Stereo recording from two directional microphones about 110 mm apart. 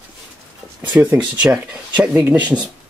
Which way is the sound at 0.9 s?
20° right (ahead or behind).